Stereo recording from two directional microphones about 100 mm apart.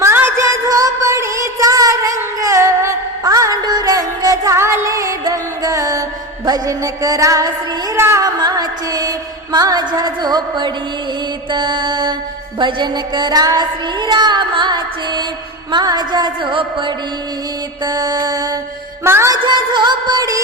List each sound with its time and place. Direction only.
0.0 s music: 25° right (ahead or behind)
6.4 s a sound: 35° right (ahead or behind)
7.9 s music: 25° right (ahead or behind)
8.2 s music: 40° right (ahead or behind)
17.8 s a sound: 40° right (ahead or behind)
19.0 s music: 25° right (ahead or behind)
19.3 s music: 50° right (ahead or behind)